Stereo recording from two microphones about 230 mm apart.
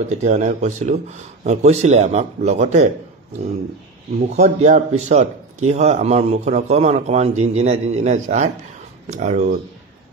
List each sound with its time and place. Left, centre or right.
0.1 s speech: right
4.3 s speech: right